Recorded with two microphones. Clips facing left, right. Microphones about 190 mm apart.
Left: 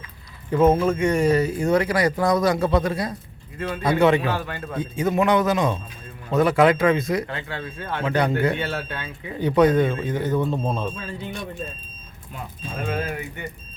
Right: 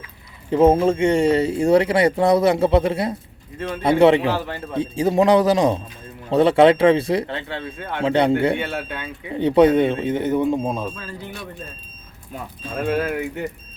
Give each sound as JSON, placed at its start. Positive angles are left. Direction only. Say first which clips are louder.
{"t": 0.5, "sound": "speech", "louder": "right 3 dB", "side_deg": -30}
{"t": 8.5, "sound": "speech", "louder": "right 2 dB", "side_deg": -15}
{"t": 9.4, "sound": "speech", "louder": "right 3 dB", "side_deg": -25}
{"t": 12.8, "sound": "speech", "louder": "right 6 dB", "side_deg": -65}